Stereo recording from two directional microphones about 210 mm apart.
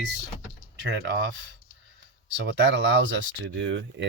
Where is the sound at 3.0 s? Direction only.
60° right (ahead or behind).